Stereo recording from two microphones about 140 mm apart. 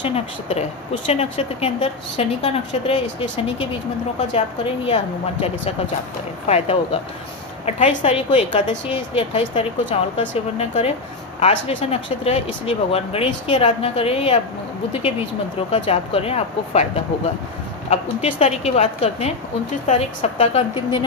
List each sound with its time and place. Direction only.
0.0 s a woman's voice: 45° left (ahead or behind)
17.8 s a woman's voice: 45° left (ahead or behind)